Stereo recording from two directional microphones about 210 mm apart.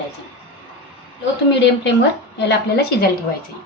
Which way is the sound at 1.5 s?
55° left (ahead or behind).